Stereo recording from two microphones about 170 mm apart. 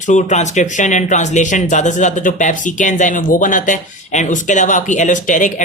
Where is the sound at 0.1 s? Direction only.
45° left (ahead or behind).